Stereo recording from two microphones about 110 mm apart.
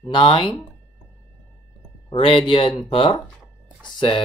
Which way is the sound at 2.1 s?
55° left (ahead or behind).